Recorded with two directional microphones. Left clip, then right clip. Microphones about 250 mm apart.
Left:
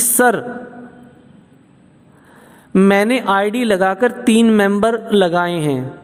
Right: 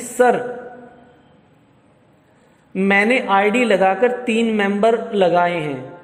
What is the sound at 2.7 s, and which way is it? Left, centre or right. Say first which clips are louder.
Speech: left 2 dB; left.